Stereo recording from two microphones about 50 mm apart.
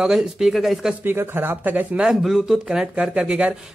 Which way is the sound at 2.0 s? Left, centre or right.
Centre.